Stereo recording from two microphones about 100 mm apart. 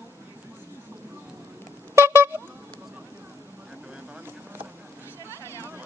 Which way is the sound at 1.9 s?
25° right (ahead or behind).